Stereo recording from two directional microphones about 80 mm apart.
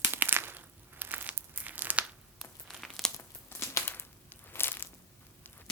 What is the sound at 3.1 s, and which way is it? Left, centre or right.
Crumpling, left.